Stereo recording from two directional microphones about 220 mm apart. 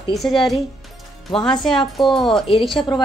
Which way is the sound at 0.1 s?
Centre (ahead or behind).